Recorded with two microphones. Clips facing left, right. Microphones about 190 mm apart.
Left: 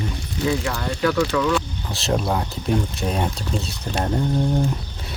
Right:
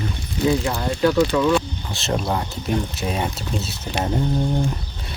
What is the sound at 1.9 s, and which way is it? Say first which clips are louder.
Speech: left 1 dB; centre (ahead or behind).